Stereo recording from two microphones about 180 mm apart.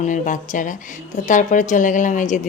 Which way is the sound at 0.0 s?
45° left (ahead or behind).